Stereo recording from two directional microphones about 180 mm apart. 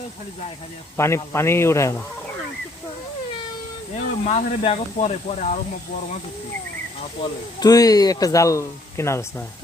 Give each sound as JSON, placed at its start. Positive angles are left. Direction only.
{"t": 0.9, "sound": "a man's voice", "side_deg": 15}
{"t": 4.2, "sound": "speech", "side_deg": 40}
{"t": 7.2, "sound": "speech", "side_deg": 20}